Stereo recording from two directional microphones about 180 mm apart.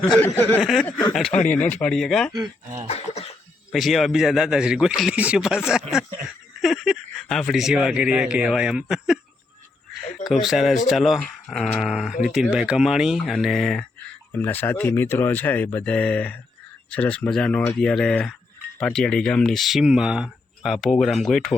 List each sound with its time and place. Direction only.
0.1 s speech: 10° left (ahead or behind)
2.8 s cough: 35° left (ahead or behind)
3.7 s speech: centre (ahead or behind)
10.4 s speech: centre (ahead or behind)